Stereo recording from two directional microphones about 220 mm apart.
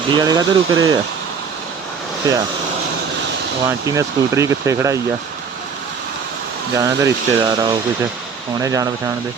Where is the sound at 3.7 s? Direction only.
15° right (ahead or behind).